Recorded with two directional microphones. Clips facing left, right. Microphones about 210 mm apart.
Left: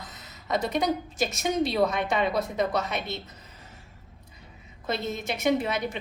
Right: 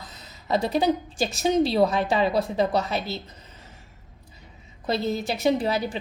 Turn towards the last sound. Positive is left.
turn(degrees=-35)  # may be behind; listen again after turning